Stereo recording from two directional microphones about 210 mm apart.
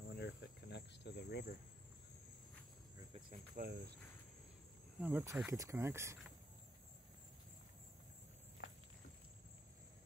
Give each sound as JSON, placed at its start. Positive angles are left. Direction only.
{"t": 0.1, "sound": "cricket", "side_deg": 55}
{"t": 3.3, "sound": "cricket", "side_deg": -45}
{"t": 5.0, "sound": "speech", "side_deg": -10}
{"t": 8.6, "sound": "walk", "side_deg": 55}